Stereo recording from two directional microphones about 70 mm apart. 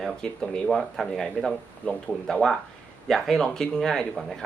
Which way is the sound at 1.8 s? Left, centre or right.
Centre.